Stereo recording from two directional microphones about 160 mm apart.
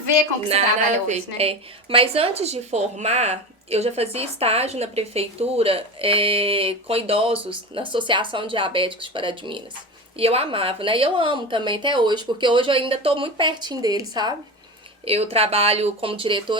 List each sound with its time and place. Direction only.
1.0 s a woman's voice: 40° right (ahead or behind); by 14.3 s 25° right (ahead or behind)
15.0 s a woman's voice: 40° right (ahead or behind)